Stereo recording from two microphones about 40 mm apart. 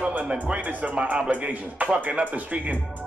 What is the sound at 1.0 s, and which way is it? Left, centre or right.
Speech, right.